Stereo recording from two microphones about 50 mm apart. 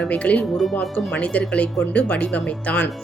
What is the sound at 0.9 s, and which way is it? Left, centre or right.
Speech, left.